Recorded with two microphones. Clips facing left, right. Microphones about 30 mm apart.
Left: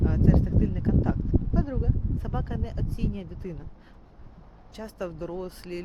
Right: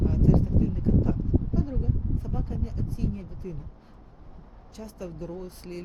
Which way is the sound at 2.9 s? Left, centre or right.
Left.